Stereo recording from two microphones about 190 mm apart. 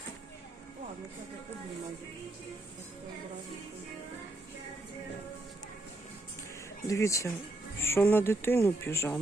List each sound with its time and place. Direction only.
6.8 s speech: 15° left (ahead or behind)